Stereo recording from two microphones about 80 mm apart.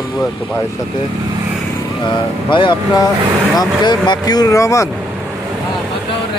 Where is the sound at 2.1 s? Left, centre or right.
Left.